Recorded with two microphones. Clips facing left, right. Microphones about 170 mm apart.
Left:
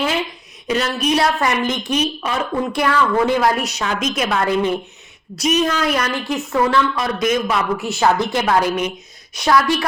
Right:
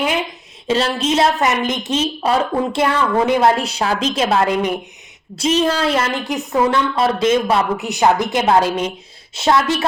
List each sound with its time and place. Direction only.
0.7 s a woman's voice: 30° right (ahead or behind)
7.9 s a woman's voice: 15° right (ahead or behind)